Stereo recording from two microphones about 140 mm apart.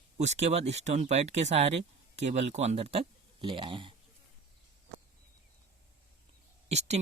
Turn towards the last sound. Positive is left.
turn(degrees=-50)  # may be behind; listen again after turning